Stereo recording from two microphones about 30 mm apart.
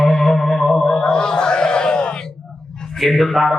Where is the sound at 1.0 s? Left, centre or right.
Left.